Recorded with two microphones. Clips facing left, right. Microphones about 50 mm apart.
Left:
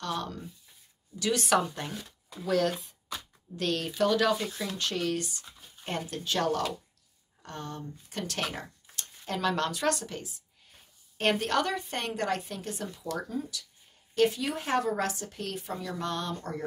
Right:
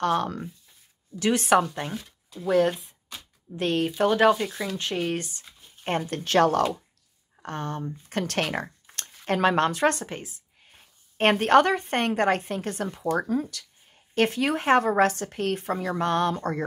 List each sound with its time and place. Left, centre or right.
0.0 s a woman's voice: right
1.1 s a woman's voice: right
13.2 s a woman's voice: right